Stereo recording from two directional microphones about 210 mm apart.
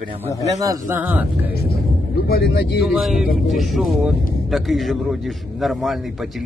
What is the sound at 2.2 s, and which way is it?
Speech, 50° left (ahead or behind).